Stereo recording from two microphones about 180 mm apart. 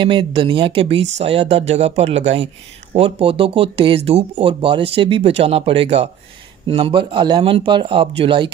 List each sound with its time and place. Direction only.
0.0 s speech: 25° right (ahead or behind)